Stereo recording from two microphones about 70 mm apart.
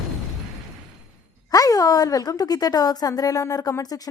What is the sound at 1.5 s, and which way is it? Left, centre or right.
A woman's voice, left.